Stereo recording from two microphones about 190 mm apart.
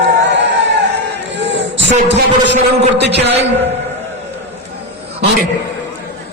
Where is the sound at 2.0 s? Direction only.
65° right (ahead or behind).